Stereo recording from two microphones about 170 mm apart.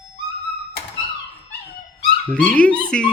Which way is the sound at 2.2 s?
10° left (ahead or behind).